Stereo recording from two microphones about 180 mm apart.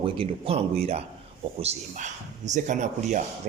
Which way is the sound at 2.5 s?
40° right (ahead or behind).